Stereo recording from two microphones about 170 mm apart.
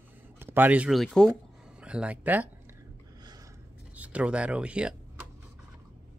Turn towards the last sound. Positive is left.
turn(degrees=-5)  # may be behind; listen again after turning